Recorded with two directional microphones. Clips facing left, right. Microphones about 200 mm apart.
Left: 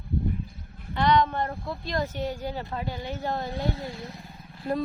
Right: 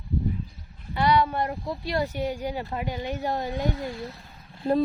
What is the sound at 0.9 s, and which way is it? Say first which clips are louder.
Speech: even; 10° right (ahead or behind).